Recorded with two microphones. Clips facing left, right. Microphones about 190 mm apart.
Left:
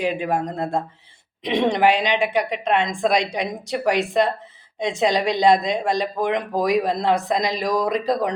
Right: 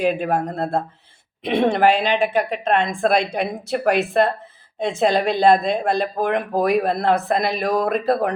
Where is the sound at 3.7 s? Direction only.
60° right (ahead or behind).